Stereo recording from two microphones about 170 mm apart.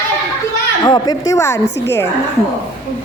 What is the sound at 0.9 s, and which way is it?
Speech, 20° left (ahead or behind).